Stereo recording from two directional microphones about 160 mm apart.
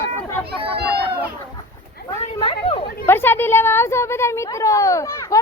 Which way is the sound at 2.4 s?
30° left (ahead or behind).